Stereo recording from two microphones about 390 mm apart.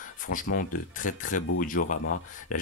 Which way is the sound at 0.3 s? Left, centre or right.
Left.